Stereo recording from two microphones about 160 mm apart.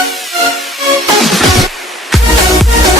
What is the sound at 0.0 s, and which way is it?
Music, centre (ahead or behind).